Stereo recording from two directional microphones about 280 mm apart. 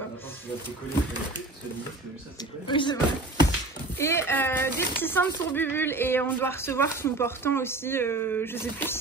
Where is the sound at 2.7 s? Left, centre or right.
Centre.